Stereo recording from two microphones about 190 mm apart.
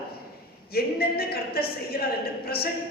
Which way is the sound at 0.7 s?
55° left (ahead or behind).